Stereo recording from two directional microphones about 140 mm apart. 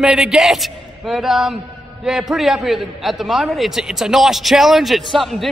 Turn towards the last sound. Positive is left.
turn(degrees=0)  # may be behind; listen again after turning